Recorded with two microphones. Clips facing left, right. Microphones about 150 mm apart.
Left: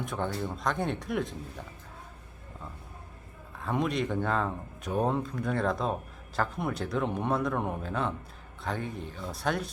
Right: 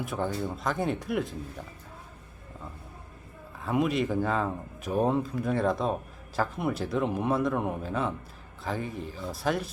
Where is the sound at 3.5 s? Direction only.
5° right (ahead or behind).